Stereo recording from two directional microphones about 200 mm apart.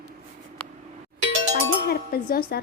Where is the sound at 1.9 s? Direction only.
45° left (ahead or behind).